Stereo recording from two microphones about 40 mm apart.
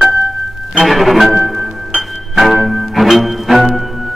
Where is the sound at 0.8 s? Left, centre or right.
Centre.